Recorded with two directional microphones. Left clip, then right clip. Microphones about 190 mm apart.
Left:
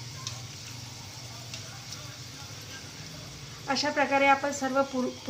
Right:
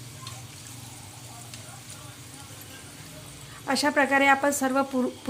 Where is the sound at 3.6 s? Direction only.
55° right (ahead or behind).